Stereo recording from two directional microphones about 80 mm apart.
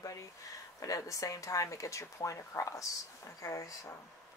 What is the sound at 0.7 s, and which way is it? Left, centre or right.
Speech, left.